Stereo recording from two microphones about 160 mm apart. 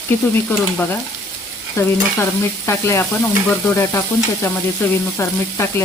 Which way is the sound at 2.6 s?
15° left (ahead or behind).